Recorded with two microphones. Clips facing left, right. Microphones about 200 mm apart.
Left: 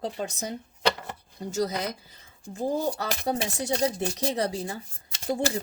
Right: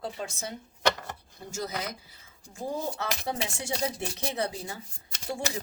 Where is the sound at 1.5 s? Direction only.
35° left (ahead or behind).